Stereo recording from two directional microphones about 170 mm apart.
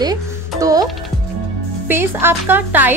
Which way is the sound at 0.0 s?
20° right (ahead or behind).